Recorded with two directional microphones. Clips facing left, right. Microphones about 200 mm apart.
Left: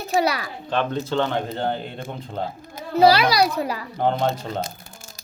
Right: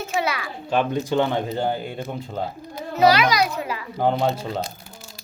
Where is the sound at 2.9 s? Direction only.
30° left (ahead or behind).